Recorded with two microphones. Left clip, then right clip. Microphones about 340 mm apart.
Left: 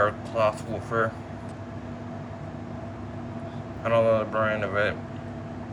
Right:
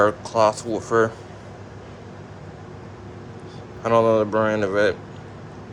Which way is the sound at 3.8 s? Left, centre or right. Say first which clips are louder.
Right 4 dB; centre.